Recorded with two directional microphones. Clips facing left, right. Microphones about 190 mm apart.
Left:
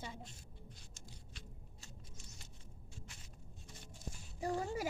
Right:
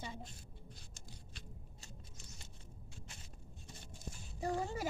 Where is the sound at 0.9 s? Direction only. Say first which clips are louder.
Right 1 dB; 35° right (ahead or behind).